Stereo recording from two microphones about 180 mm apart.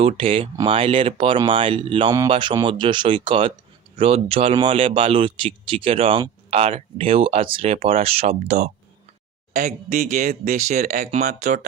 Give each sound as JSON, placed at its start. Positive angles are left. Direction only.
{"t": 0.0, "sound": "speech", "side_deg": -30}